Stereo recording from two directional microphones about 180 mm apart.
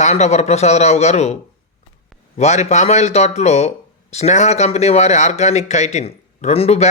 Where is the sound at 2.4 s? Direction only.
40° left (ahead or behind).